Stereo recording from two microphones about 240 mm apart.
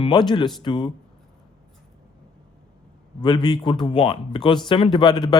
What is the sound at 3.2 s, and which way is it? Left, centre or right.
Speech, centre.